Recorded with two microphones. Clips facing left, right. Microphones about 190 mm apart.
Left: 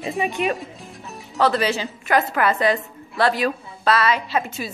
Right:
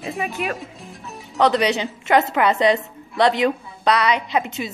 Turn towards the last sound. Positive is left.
turn(degrees=-20)  # may be behind; listen again after turning